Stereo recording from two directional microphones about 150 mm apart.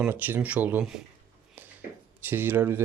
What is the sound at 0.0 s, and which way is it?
Speech, 10° right (ahead or behind).